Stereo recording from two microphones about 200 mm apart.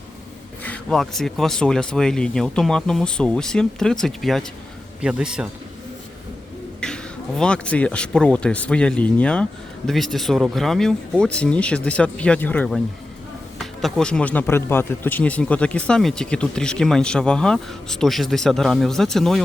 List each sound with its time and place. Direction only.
0.6 s speech: 5° left (ahead or behind)
6.7 s speech: 5° left (ahead or behind)